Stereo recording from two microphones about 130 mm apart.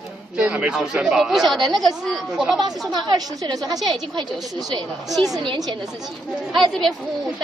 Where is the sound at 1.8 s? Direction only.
Centre (ahead or behind).